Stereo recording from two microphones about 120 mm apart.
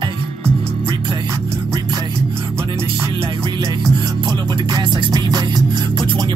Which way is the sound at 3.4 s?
30° right (ahead or behind).